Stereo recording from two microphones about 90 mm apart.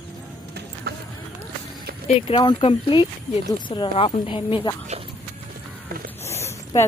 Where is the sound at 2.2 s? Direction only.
90° left.